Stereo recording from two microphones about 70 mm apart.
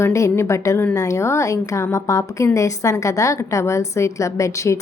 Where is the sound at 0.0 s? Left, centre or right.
Left.